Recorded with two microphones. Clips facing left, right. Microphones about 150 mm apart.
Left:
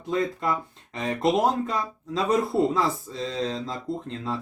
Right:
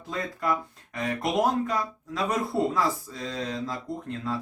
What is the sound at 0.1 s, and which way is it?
Speech, 25° left (ahead or behind).